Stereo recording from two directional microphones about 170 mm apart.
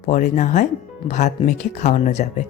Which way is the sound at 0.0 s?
45° left (ahead or behind).